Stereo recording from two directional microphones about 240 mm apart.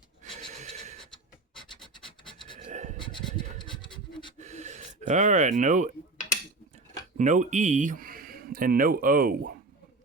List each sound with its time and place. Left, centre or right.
0.5 s a sound: right
1.5 s scratch: centre
2.6 s pant: right
3.0 s scratch: centre
4.4 s gasp: right
7.2 s speech: right